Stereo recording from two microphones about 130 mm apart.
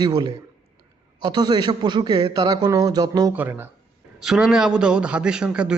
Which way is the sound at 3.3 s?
15° right (ahead or behind).